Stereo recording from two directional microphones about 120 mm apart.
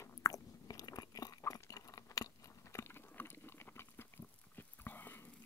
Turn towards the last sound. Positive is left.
turn(degrees=15)  # may be behind; listen again after turning